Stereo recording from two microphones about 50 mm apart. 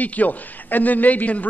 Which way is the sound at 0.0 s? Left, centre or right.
Left.